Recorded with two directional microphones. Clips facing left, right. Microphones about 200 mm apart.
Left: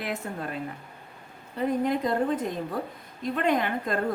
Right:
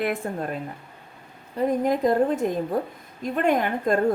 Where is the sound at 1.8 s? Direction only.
45° right (ahead or behind).